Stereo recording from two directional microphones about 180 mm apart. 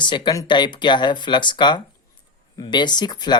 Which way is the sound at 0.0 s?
25° left (ahead or behind).